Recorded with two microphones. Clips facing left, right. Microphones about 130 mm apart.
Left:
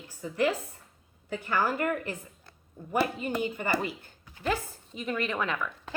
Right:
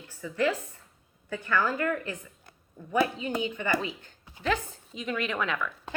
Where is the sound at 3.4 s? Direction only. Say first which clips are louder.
Right 1 dB; 45° left (ahead or behind).